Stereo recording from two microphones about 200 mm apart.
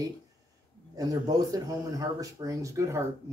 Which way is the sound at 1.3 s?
15° right (ahead or behind).